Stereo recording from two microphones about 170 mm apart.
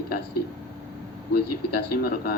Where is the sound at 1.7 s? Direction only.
65° left (ahead or behind).